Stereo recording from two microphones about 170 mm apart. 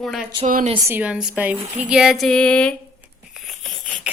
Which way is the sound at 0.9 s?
10° right (ahead or behind).